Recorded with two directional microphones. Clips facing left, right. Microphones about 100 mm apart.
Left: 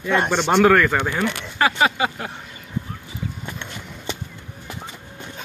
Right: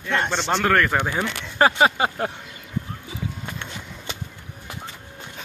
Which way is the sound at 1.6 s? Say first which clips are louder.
Right 2 dB; 35° right (ahead or behind).